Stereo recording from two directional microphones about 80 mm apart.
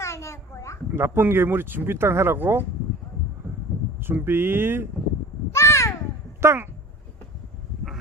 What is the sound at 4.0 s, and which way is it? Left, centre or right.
Speech, right.